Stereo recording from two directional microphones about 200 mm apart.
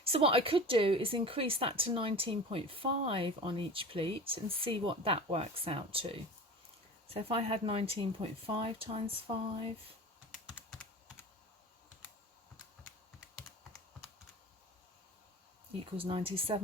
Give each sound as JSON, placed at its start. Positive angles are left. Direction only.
{"t": 0.0, "sound": "speech", "side_deg": -30}
{"t": 10.5, "sound": "computer keyboard", "side_deg": 0}
{"t": 16.0, "sound": "speech", "side_deg": -25}